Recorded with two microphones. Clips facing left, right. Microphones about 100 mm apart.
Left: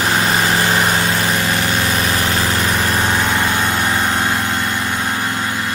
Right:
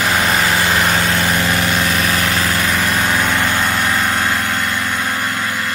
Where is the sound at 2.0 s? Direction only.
30° left (ahead or behind).